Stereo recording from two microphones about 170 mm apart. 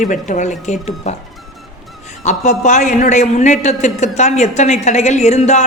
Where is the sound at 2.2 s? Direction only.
45° left (ahead or behind).